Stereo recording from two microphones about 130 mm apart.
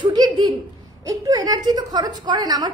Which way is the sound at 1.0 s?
30° right (ahead or behind).